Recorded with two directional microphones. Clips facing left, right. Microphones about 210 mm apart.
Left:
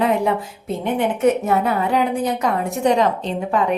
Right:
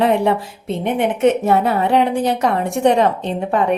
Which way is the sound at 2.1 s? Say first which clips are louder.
Right 3 dB; 80° right.